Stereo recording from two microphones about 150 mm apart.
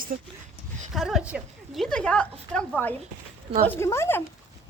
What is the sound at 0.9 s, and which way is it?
Speech, centre (ahead or behind).